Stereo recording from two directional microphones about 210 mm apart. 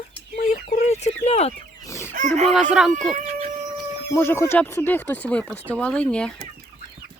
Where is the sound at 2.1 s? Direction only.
35° right (ahead or behind).